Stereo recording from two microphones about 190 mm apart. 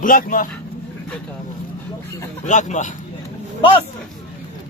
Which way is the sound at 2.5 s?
40° left (ahead or behind).